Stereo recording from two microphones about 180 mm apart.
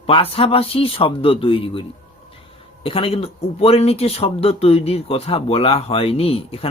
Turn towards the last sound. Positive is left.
turn(degrees=30)  # may be behind; listen again after turning